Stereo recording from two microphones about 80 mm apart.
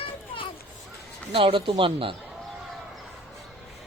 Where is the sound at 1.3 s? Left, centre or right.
Right.